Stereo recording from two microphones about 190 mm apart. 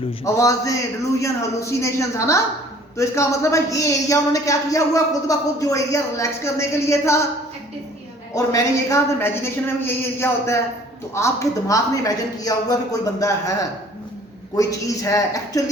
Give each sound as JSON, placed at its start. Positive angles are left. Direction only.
{"t": 0.3, "sound": "a woman's voice", "side_deg": 15}
{"t": 8.4, "sound": "a woman's voice", "side_deg": 15}